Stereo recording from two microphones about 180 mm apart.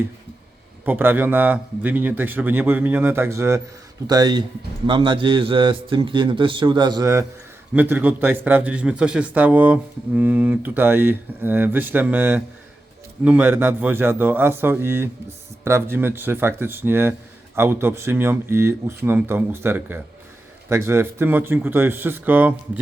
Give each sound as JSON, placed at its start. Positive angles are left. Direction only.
{"t": 0.9, "sound": "a man's voice", "side_deg": -10}